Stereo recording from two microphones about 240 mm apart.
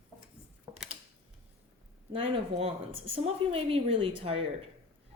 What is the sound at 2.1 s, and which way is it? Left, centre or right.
A woman's voice, right.